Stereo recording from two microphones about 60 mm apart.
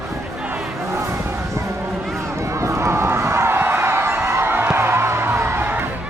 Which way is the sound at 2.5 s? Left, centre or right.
Right.